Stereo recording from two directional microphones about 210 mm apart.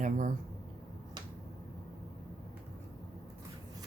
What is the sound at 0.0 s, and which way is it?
Speech, 35° right (ahead or behind).